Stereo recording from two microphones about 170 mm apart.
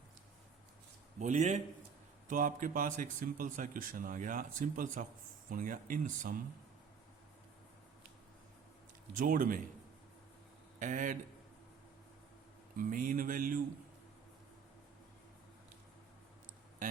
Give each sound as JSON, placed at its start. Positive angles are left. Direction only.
{"t": 1.2, "sound": "speech", "side_deg": -45}
{"t": 9.1, "sound": "speech", "side_deg": -55}
{"t": 10.8, "sound": "a man's voice", "side_deg": -50}
{"t": 12.7, "sound": "speech", "side_deg": -55}